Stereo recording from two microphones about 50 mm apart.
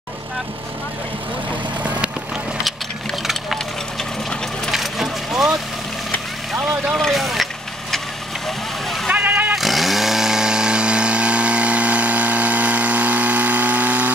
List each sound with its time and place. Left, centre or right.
1.8 s vehicle: right
4.6 s vehicle: centre
7.0 s vehicle: centre
9.1 s vehicle: right
9.6 s chainsaw: centre; by 14.1 s right